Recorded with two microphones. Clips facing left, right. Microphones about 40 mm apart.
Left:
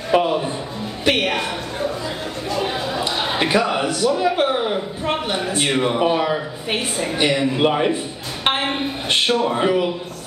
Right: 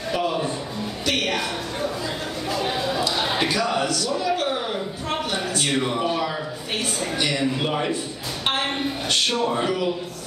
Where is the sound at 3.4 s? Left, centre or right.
Left.